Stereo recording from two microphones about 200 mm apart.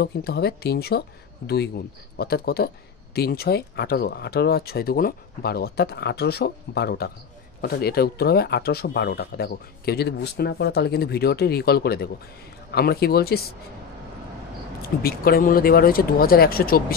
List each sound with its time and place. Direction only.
0.0 s speech: 50° left (ahead or behind)
2.1 s speech: 50° left (ahead or behind)
15.0 s speech: 50° left (ahead or behind)